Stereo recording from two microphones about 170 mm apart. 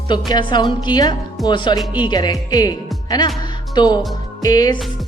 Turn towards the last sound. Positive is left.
turn(degrees=20)  # may be behind; listen again after turning